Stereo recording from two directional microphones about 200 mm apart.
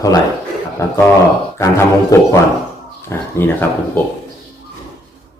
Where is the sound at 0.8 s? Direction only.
15° left (ahead or behind).